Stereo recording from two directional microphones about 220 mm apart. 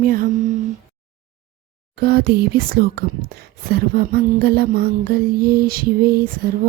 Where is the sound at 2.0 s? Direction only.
45° right (ahead or behind).